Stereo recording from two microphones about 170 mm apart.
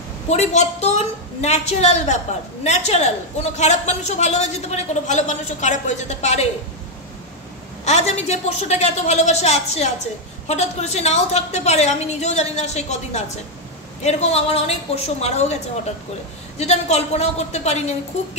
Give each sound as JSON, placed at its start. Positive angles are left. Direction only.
{"t": 0.3, "sound": "a woman's voice", "side_deg": 40}
{"t": 7.8, "sound": "a woman's voice", "side_deg": 40}